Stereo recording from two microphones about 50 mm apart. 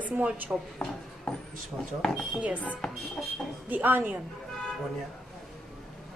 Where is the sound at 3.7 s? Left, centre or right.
Right.